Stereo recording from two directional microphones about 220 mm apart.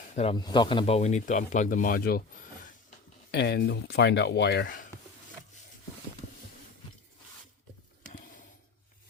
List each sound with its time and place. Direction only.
0.2 s speech: 20° left (ahead or behind); by 4.9 s 45° left (ahead or behind)